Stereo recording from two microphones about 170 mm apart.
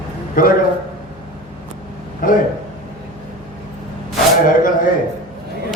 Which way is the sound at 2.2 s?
55° left (ahead or behind).